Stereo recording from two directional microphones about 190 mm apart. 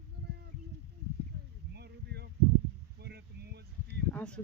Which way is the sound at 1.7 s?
60° right (ahead or behind).